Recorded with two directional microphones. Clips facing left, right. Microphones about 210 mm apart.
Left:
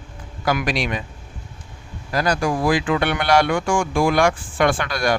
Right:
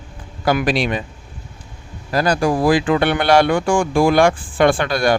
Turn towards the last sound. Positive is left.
turn(degrees=-30)  # may be behind; listen again after turning